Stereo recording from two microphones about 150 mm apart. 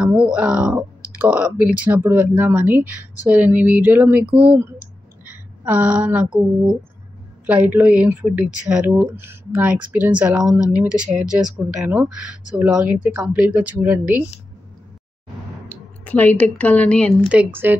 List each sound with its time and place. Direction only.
0.0 s speech: 10° right (ahead or behind)
7.4 s speech: 10° right (ahead or behind)
15.7 s speech: 10° left (ahead or behind)
17.3 s speech: 10° right (ahead or behind)